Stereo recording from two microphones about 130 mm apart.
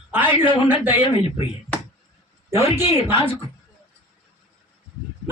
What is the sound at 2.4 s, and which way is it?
Speech, 20° right (ahead or behind).